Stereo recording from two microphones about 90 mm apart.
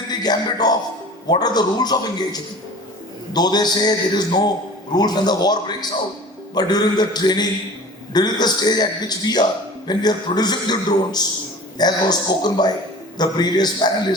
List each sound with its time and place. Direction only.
0.1 s a man's voice: 50° left (ahead or behind)